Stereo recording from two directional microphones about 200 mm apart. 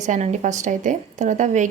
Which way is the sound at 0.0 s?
35° right (ahead or behind).